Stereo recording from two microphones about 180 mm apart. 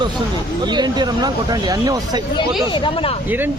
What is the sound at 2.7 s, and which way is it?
Speech, 30° left (ahead or behind).